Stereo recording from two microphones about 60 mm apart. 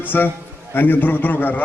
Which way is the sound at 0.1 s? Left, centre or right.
Left.